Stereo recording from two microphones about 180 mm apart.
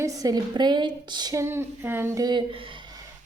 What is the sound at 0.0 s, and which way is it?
A woman's voice, 20° right (ahead or behind).